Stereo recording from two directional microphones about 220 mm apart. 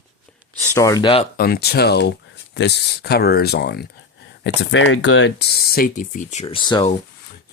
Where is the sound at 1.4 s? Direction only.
45° left (ahead or behind); by 6.8 s 20° left (ahead or behind).